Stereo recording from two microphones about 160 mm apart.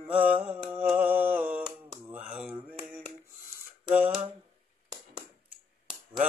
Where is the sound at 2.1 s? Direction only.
10° right (ahead or behind).